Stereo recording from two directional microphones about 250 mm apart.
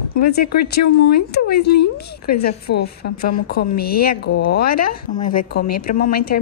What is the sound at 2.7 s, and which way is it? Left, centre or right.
A woman's voice, left.